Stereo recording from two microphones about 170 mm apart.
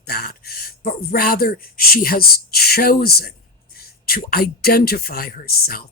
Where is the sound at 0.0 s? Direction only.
65° left (ahead or behind).